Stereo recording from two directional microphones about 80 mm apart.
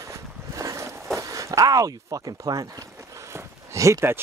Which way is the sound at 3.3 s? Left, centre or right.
Right.